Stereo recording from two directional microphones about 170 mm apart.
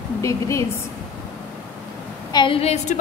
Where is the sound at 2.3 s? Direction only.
30° left (ahead or behind).